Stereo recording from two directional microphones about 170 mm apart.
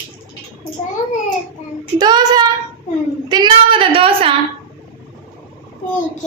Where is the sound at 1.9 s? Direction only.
25° right (ahead or behind).